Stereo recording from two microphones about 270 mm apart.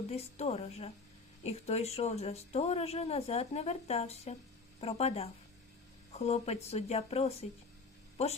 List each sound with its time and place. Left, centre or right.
0.1 s speech: left